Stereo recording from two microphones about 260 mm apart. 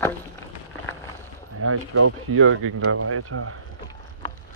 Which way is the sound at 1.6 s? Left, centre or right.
Right.